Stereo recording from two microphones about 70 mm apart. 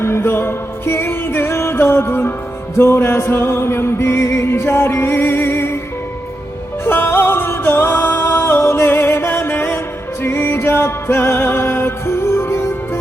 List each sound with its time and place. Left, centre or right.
0.0 s music: left
6.8 s music: left